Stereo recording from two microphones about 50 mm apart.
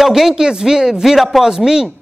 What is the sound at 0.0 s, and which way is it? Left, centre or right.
A woman's voice, centre.